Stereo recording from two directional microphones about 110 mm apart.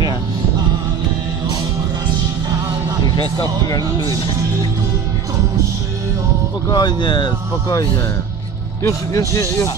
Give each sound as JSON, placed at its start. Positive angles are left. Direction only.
{"t": 6.7, "sound": "speech", "side_deg": 45}
{"t": 8.8, "sound": "speech", "side_deg": 30}